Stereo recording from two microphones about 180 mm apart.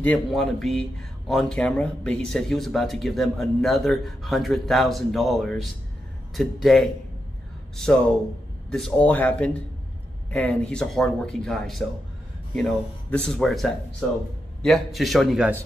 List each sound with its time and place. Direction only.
0.0 s speech: 5° left (ahead or behind)